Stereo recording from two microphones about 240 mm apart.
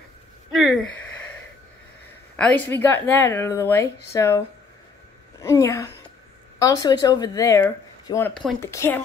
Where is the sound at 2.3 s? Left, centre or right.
Centre.